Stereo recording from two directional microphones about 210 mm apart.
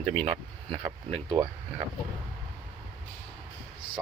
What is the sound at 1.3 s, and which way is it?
Speech, 10° right (ahead or behind).